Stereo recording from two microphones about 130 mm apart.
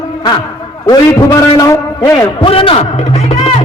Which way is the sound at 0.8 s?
30° left (ahead or behind).